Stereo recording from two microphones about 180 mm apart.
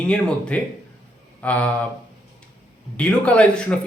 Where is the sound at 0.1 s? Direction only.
5° left (ahead or behind).